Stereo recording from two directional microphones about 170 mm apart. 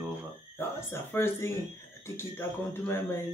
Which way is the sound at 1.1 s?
15° left (ahead or behind).